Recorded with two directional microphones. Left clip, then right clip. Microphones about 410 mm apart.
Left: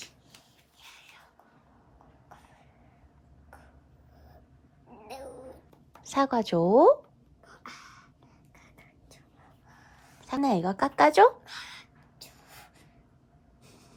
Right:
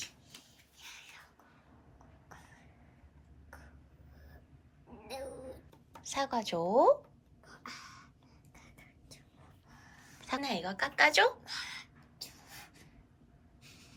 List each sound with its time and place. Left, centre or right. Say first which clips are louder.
0.8 s whispering: right 1 dB; centre
5.0 s dog: left 1 dB; centre
6.1 s speech: left 8 dB; left
7.4 s a sound: left 2 dB; centre
10.2 s a woman's voice: left 8 dB; centre
11.4 s a sound: right 1 dB; centre
13.7 s snort: even; centre